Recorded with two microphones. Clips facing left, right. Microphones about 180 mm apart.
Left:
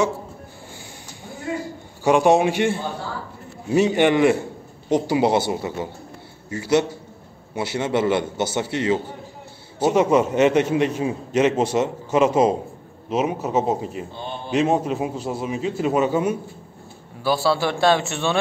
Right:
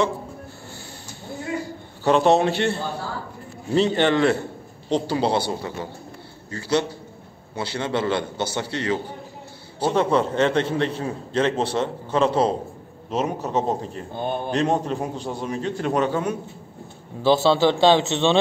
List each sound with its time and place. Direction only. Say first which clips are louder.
2.0 s a man's voice: left 1 dB; 10° left (ahead or behind)
9.8 s a man's voice: left 3 dB; 10° left (ahead or behind)
14.1 s a sound: right 6 dB; 50° right (ahead or behind)
14.5 s a man's voice: left 4 dB; 5° left (ahead or behind)
17.2 s a man's voice: right 3 dB; 20° right (ahead or behind)